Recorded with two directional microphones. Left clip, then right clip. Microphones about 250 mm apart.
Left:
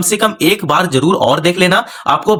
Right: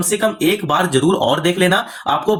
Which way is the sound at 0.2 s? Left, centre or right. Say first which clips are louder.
Left 5 dB; left.